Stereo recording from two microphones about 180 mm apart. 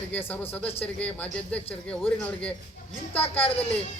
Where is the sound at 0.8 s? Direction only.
10° left (ahead or behind).